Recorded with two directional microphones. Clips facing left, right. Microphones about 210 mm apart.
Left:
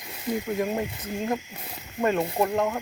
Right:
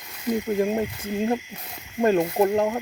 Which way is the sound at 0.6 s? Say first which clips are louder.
Right 4 dB; 30° right (ahead or behind).